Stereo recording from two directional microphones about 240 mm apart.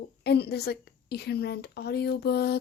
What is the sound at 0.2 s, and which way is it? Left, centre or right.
A woman's voice, left.